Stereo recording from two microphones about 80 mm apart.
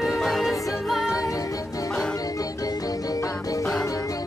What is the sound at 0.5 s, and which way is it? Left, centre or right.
Music, left.